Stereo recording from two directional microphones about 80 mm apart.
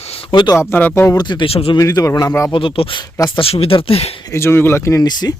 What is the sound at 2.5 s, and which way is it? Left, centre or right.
Speech, left.